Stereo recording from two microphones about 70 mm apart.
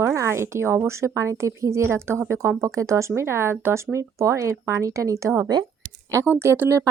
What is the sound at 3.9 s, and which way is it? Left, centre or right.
Speech, right.